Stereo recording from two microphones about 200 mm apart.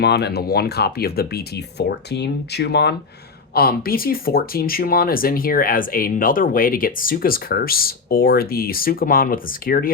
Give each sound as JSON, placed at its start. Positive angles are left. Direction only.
{"t": 0.0, "sound": "speech", "side_deg": 55}